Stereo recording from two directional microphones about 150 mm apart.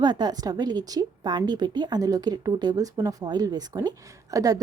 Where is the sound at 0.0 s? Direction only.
30° right (ahead or behind).